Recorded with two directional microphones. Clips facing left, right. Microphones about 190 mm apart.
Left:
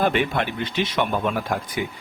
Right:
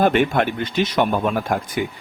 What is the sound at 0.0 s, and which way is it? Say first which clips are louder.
Speech: right 5 dB; 50° right (ahead or behind).